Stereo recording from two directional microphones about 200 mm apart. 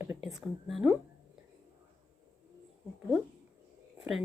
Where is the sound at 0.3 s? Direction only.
Centre (ahead or behind).